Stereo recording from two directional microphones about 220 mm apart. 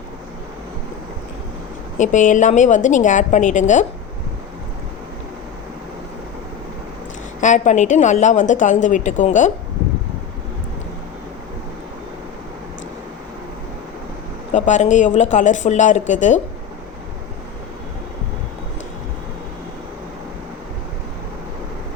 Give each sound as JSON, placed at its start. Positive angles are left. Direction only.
{"t": 2.0, "sound": "a woman's voice", "side_deg": 35}
{"t": 7.4, "sound": "a woman's voice", "side_deg": 35}
{"t": 14.5, "sound": "a woman's voice", "side_deg": 35}